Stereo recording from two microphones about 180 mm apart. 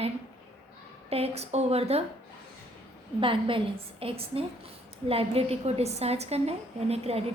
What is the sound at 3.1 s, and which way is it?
A woman's voice, 30° right (ahead or behind).